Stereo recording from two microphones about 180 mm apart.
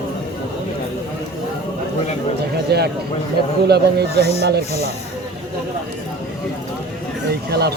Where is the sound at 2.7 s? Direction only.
65° right (ahead or behind).